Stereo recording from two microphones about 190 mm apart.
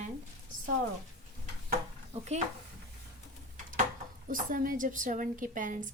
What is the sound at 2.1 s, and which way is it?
Speech, 35° right (ahead or behind).